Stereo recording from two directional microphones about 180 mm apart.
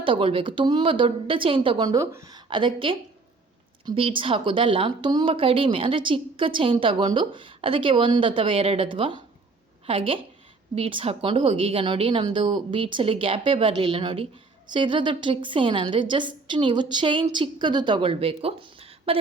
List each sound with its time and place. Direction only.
0.0 s a woman's voice: 30° right (ahead or behind)